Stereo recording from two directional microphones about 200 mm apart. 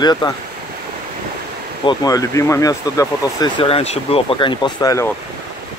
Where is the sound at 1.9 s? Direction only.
15° left (ahead or behind).